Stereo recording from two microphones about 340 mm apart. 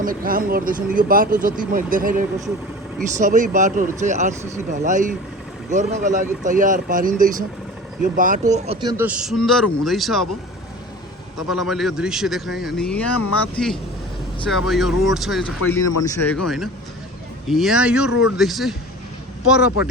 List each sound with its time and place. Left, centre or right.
0.0 s speech: right; by 10.2 s centre
11.3 s speech: centre
17.5 s speech: centre